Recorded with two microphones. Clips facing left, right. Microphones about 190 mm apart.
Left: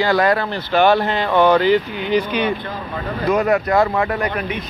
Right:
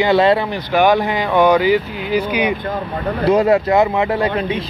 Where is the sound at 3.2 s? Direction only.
30° right (ahead or behind).